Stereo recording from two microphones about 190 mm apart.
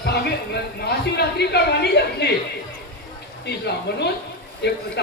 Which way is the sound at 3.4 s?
60° left (ahead or behind).